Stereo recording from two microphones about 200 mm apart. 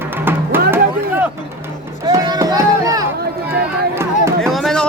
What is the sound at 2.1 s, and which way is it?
Run, 20° right (ahead or behind).